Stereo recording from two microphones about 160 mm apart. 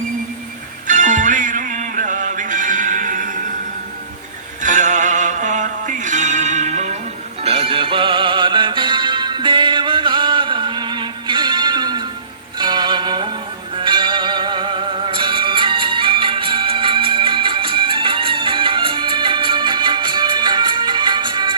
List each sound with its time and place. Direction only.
0.9 s music: 55° right (ahead or behind)
4.6 s music: 50° right (ahead or behind); by 21.5 s 30° right (ahead or behind)